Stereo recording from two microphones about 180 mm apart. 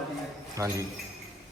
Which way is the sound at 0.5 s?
15° right (ahead or behind).